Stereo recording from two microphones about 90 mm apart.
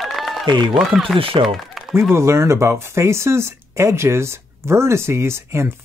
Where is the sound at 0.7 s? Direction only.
Centre (ahead or behind).